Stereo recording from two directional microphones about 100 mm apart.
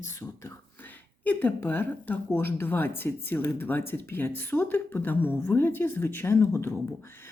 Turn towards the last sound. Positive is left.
turn(degrees=25)  # may be behind; listen again after turning